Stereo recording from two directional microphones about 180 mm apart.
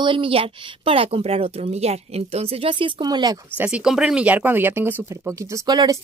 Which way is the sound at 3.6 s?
5° right (ahead or behind).